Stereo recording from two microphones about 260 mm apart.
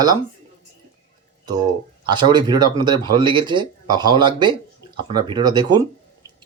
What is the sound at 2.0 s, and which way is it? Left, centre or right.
Speech, centre.